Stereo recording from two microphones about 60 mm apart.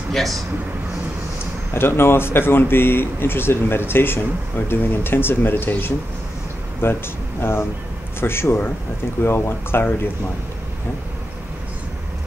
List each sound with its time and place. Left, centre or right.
0.1 s speech: centre
1.7 s a man's voice: left